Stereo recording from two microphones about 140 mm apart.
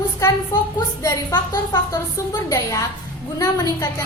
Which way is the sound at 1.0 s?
20° left (ahead or behind).